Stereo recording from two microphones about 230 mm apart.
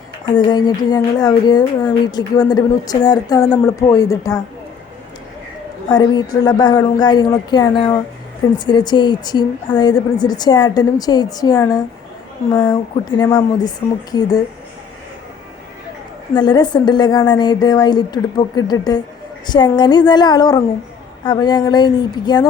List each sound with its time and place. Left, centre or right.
0.3 s speech: centre
5.9 s speech: centre
16.3 s speech: centre